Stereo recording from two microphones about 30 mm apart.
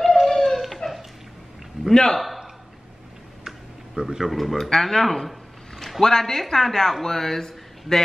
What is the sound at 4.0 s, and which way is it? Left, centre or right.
Speech, centre.